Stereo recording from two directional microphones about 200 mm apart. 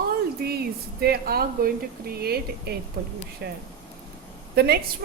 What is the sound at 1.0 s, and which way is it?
A woman's voice, 50° right (ahead or behind).